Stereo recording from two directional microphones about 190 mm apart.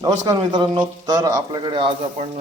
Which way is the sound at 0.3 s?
25° right (ahead or behind).